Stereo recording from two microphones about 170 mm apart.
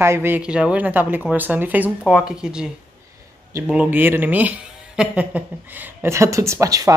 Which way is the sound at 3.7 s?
10° right (ahead or behind).